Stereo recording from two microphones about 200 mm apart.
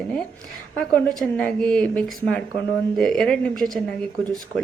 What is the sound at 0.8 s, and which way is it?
A woman's voice, 5° left (ahead or behind).